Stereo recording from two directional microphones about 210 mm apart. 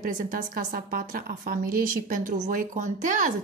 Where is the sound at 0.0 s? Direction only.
40° right (ahead or behind).